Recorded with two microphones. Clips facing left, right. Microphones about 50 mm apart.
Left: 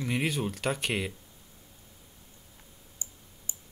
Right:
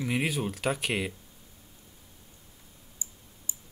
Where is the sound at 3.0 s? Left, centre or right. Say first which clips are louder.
Right 1 dB; left.